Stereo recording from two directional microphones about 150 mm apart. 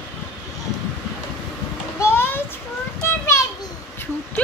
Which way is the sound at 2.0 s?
15° left (ahead or behind).